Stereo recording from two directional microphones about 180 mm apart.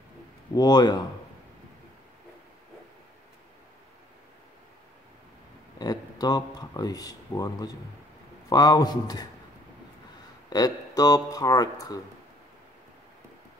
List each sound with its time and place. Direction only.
0.6 s speech: 25° left (ahead or behind)
5.8 s speech: 20° left (ahead or behind)
10.5 s speech: 20° left (ahead or behind)